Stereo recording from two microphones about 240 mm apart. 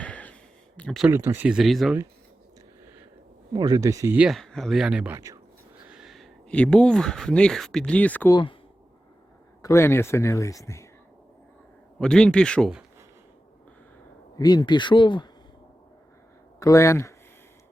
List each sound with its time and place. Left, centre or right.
0.0 s a sound: centre
0.8 s speech: centre
1.1 s speech: centre
3.5 s speech: centre
5.9 s speech: centre
9.6 s speech: centre
11.9 s speech: centre
14.3 s speech: centre
16.6 s speech: centre